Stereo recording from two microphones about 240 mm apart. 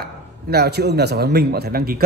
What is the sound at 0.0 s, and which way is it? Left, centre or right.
A man's voice, right.